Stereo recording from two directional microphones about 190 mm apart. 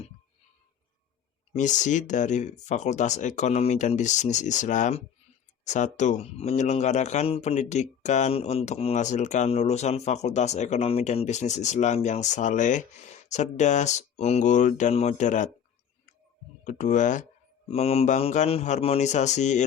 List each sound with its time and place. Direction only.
1.5 s speech: 40° left (ahead or behind)
16.6 s speech: 40° left (ahead or behind)